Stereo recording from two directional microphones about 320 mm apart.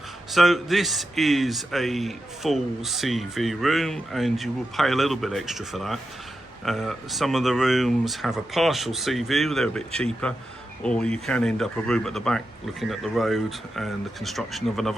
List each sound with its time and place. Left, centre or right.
0.3 s a man's voice: centre